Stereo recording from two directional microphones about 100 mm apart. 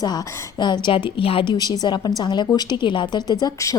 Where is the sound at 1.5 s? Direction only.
45° left (ahead or behind).